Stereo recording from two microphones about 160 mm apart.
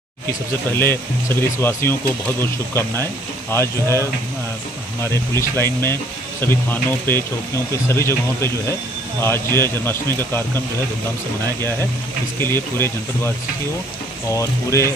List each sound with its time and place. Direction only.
0.3 s speech: 15° left (ahead or behind)
5.1 s speech: 15° left (ahead or behind)